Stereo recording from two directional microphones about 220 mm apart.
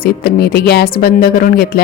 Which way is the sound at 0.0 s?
45° left (ahead or behind).